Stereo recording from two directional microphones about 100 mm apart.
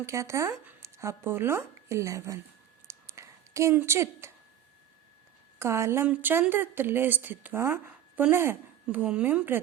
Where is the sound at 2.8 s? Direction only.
30° right (ahead or behind).